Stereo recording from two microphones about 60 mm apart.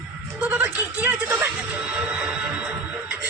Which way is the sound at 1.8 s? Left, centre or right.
Centre.